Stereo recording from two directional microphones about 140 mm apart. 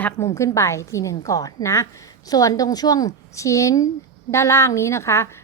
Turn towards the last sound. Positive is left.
turn(degrees=20)  # may be behind; listen again after turning